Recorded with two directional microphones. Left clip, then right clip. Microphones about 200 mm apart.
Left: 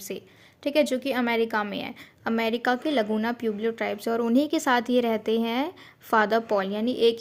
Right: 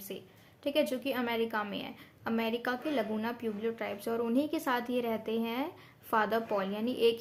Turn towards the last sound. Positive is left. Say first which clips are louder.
# left 6 dB
turn(degrees=30)  # may be behind; listen again after turning